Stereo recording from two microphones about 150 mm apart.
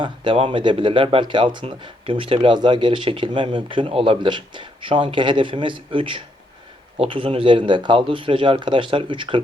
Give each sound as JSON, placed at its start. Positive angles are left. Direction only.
{"t": 0.0, "sound": "speech", "side_deg": -35}